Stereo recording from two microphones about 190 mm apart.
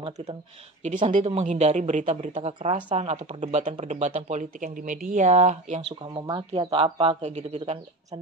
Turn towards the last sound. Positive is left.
turn(degrees=-35)  # may be behind; listen again after turning